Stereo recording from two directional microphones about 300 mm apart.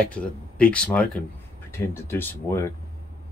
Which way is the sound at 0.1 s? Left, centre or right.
Centre.